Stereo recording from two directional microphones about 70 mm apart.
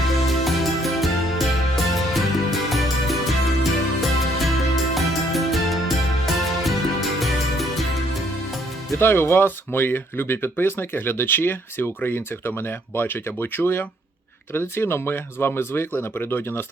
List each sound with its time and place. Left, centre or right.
0.4 s music: centre
9.0 s speech: left